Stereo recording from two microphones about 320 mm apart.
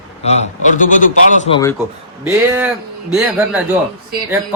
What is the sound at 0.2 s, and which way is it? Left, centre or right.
A man's voice, left.